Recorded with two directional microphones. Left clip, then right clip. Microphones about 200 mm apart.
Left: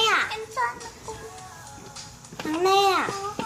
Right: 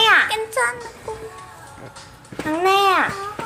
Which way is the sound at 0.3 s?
45° right (ahead or behind).